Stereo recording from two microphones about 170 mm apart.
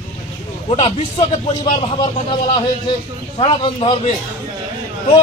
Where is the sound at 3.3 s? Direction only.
30° left (ahead or behind).